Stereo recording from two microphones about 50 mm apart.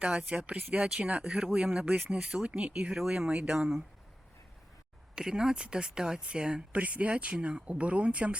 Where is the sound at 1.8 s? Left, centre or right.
Right.